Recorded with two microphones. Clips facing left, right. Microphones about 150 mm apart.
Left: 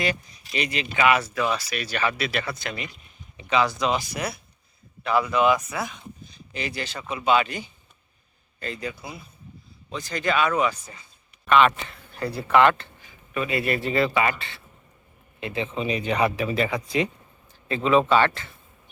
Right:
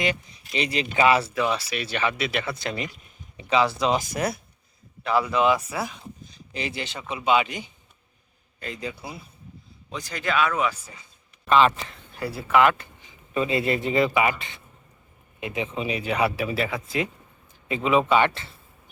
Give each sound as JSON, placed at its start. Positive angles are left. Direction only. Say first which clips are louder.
{"t": 0.0, "sound": "speech", "louder": "even", "side_deg": -25}
{"t": 3.9, "sound": "speech", "louder": "right 3 dB", "side_deg": -45}
{"t": 5.3, "sound": "speech", "louder": "left 1 dB", "side_deg": -25}
{"t": 9.9, "sound": "speech", "louder": "left 2 dB", "side_deg": -10}
{"t": 11.4, "sound": "speech", "louder": "even", "side_deg": -30}
{"t": 12.2, "sound": "speech", "louder": "left 1 dB", "side_deg": -5}
{"t": 13.0, "sound": "speech", "louder": "right 3 dB", "side_deg": -25}
{"t": 17.7, "sound": "speech", "louder": "left 1 dB", "side_deg": -10}